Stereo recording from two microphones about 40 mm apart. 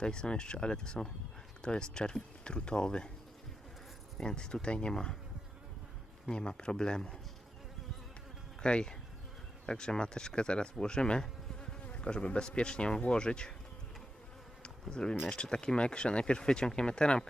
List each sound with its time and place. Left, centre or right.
0.0 s speech: left
4.2 s speech: centre
6.3 s speech: left
8.6 s speech: left
14.6 s insect: left
15.3 s speech: centre